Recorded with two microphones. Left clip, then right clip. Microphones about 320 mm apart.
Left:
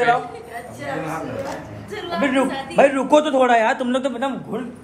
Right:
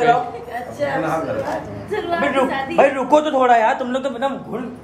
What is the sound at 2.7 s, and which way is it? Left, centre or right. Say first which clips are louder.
A man's voice: even; left.